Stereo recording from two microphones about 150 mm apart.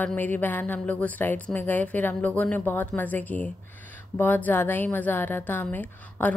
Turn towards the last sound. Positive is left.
turn(degrees=10)  # may be behind; listen again after turning